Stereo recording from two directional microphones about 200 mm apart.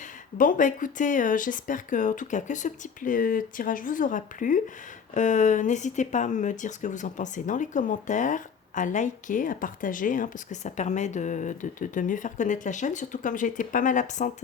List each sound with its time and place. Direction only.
0.3 s speech: 40° left (ahead or behind)